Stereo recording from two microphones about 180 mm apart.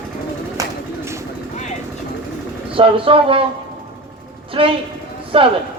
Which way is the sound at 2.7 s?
30° right (ahead or behind).